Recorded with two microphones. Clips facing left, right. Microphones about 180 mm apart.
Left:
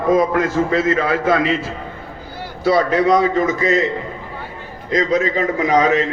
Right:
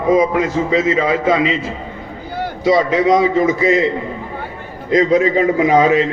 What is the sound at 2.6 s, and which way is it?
A man's voice, 20° right (ahead or behind).